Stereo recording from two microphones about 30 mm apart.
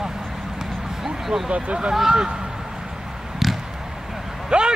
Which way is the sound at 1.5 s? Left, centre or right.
Right.